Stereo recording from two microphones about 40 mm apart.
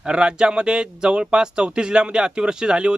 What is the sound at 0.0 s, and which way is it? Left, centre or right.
Speech, right.